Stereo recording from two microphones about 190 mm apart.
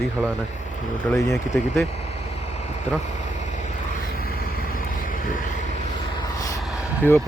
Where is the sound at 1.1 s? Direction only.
10° left (ahead or behind).